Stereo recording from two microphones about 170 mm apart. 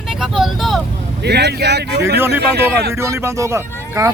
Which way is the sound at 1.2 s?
80° right.